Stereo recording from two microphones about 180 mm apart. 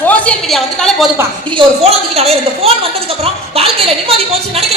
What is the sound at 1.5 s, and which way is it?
A woman's voice, 30° right (ahead or behind).